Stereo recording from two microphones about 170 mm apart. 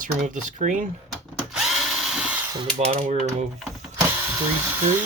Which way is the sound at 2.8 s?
40° right (ahead or behind).